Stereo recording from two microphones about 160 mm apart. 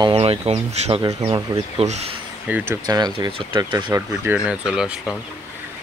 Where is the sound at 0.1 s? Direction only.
40° right (ahead or behind).